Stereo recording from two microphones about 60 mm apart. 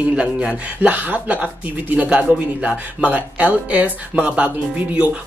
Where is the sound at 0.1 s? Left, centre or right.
Centre.